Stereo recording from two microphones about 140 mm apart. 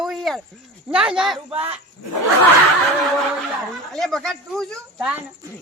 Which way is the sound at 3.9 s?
Centre (ahead or behind).